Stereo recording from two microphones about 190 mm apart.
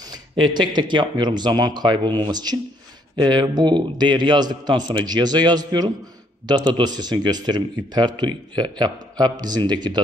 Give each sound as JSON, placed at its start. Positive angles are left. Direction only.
{"t": 0.1, "sound": "speech", "side_deg": -20}